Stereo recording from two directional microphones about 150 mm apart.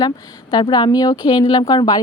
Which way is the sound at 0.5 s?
30° left (ahead or behind).